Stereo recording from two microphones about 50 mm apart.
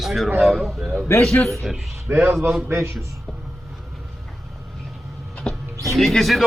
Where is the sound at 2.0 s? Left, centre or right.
Right.